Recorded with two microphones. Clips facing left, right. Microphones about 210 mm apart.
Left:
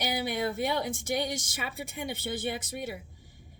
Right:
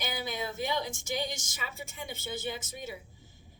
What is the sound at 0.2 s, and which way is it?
A woman's voice, 65° left (ahead or behind).